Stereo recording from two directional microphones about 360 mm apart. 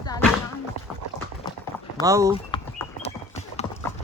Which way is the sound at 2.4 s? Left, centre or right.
Centre.